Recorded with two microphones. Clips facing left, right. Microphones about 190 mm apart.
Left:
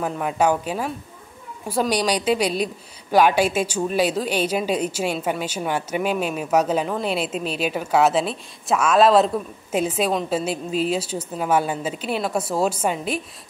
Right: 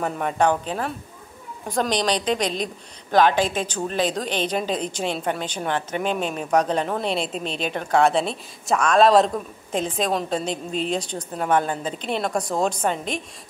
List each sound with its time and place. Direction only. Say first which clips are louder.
0.0 s a woman's voice: even; 5° left (ahead or behind)